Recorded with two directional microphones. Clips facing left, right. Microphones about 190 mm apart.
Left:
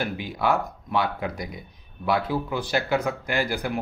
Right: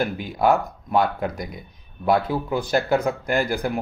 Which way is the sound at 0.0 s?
50° right (ahead or behind).